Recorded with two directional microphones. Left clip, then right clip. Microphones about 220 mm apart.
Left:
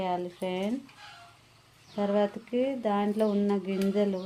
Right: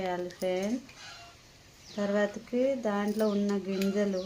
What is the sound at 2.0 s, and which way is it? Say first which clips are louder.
Speech: left 2 dB; 25° left (ahead or behind).